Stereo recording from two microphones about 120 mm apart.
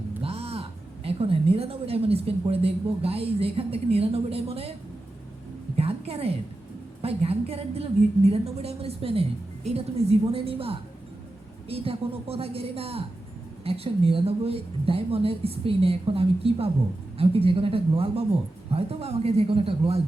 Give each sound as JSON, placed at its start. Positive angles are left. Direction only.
{"t": 0.2, "sound": "a woman's voice", "side_deg": -55}
{"t": 5.7, "sound": "a sound", "side_deg": -55}
{"t": 7.0, "sound": "a woman's voice", "side_deg": -55}